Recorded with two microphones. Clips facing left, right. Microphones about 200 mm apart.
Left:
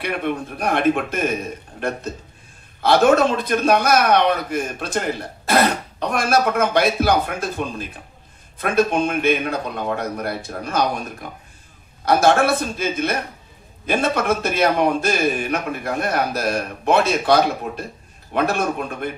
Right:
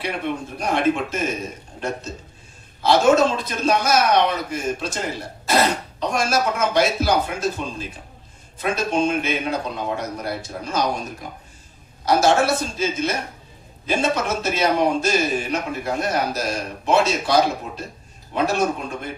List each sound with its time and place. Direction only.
0.0 s a man's voice: 55° left (ahead or behind)
12.0 s a man's voice: 55° left (ahead or behind)